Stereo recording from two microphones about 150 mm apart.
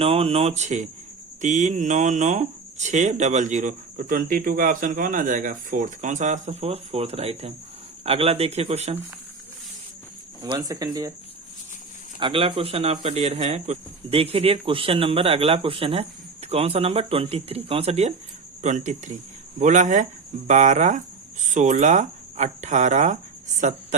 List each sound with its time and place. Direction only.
0.0 s speech: 40° right (ahead or behind)
10.4 s speech: 25° right (ahead or behind)
12.2 s speech: 35° right (ahead or behind)